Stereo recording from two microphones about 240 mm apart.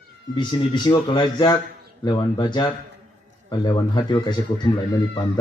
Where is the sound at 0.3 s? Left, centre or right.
Centre.